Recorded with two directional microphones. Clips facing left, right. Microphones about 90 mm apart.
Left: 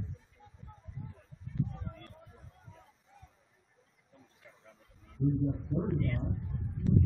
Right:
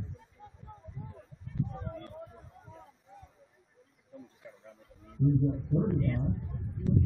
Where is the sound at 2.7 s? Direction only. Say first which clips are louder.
Right 7 dB; 35° right (ahead or behind).